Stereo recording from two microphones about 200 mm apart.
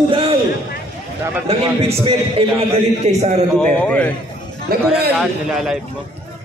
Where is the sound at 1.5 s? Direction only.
30° right (ahead or behind).